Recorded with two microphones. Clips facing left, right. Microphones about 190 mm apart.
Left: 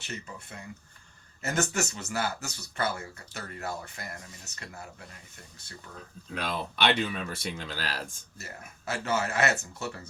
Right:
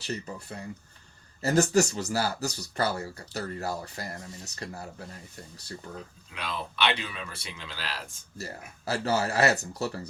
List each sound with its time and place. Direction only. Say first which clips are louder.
0.0 s speech: right 6 dB; 35° right (ahead or behind)
6.4 s speech: left 1 dB; 50° left (ahead or behind)
8.4 s speech: right 6 dB; 35° right (ahead or behind)